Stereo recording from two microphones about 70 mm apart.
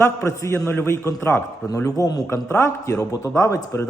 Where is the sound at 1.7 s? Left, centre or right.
Left.